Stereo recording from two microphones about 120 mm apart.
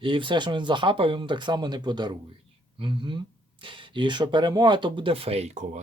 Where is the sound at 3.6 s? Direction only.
40° right (ahead or behind); by 5.8 s 75° right (ahead or behind).